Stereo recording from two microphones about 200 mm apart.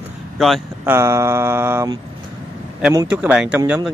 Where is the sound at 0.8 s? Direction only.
15° right (ahead or behind).